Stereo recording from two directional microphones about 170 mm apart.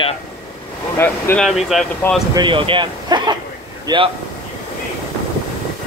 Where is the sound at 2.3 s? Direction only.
30° right (ahead or behind).